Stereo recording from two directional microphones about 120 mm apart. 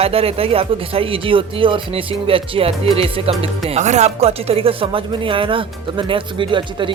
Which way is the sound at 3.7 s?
75° right (ahead or behind).